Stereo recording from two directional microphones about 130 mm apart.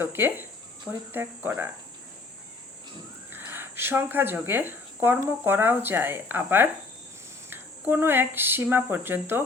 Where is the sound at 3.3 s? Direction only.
15° right (ahead or behind).